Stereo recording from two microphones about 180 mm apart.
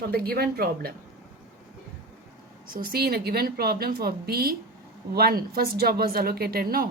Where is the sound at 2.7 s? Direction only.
55° right (ahead or behind).